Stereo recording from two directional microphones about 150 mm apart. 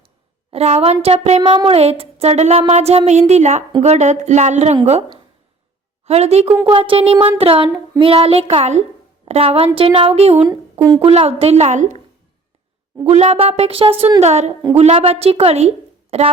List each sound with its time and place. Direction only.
0.5 s speech: 45° right (ahead or behind)
6.1 s speech: 45° right (ahead or behind)
6.5 s speech: 20° right (ahead or behind)
6.7 s a sound: 35° right (ahead or behind)
11.0 s speech: 40° right (ahead or behind)
13.1 s a woman's voice: 45° right (ahead or behind)